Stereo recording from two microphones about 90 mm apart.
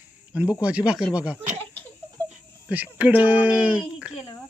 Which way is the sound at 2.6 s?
15° right (ahead or behind).